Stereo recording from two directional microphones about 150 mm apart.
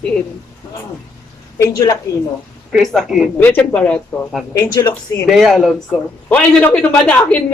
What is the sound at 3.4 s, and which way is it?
Speech, 15° left (ahead or behind).